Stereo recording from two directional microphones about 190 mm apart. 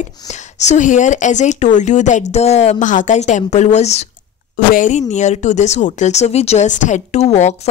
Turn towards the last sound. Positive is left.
turn(degrees=35)  # may be behind; listen again after turning